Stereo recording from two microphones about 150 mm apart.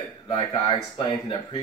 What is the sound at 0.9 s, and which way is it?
Speech, 35° left (ahead or behind).